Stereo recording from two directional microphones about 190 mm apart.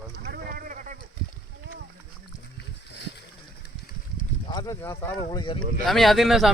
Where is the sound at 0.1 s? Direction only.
50° right (ahead or behind).